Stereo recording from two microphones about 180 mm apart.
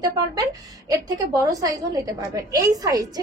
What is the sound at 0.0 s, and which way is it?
A woman's voice, 20° right (ahead or behind).